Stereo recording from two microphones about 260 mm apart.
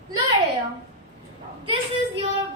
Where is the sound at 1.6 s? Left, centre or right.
Centre.